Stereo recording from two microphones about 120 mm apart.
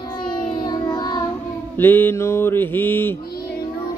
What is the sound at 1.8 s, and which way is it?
Child singing, 15° left (ahead or behind).